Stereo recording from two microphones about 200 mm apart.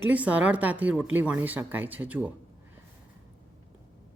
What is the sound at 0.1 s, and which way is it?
Speech, 5° right (ahead or behind).